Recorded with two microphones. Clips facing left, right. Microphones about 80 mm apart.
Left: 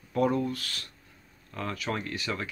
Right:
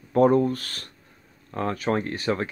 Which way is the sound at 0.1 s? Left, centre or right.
Right.